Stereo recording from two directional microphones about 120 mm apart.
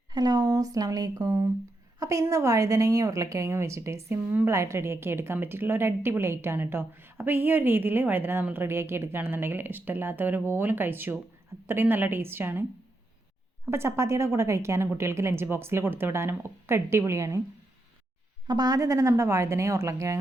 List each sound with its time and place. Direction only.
0.1 s speech: 35° right (ahead or behind)
2.0 s a sound: 30° right (ahead or behind)
2.3 s a woman's voice: 25° right (ahead or behind)
13.7 s a woman's voice: 20° right (ahead or behind)
18.4 s a woman's voice: 35° right (ahead or behind)